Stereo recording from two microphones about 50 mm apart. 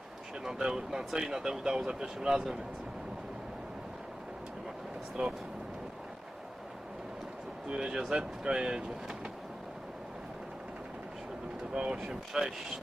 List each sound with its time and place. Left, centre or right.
0.4 s speech: centre
5.2 s speech: centre
7.7 s speech: centre
11.7 s speech: centre